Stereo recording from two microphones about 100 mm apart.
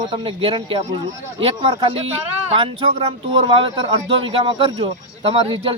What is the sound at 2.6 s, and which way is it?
Speech, 55° right (ahead or behind).